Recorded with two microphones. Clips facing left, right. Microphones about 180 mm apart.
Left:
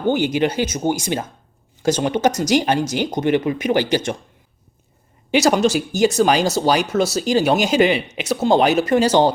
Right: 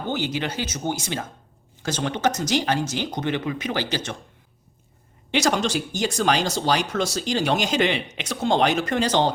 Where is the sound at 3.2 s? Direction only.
55° left (ahead or behind).